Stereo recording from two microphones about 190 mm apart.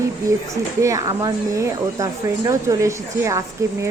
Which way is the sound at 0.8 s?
15° right (ahead or behind).